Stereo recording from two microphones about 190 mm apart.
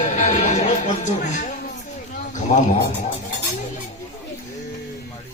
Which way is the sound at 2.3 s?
40° left (ahead or behind).